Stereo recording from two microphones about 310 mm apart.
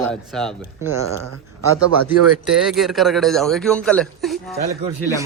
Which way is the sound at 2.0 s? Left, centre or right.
Centre.